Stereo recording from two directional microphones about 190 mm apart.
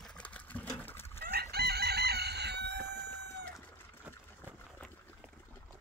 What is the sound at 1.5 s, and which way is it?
Chicken, 55° right (ahead or behind).